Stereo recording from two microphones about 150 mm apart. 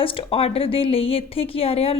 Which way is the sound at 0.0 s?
35° left (ahead or behind).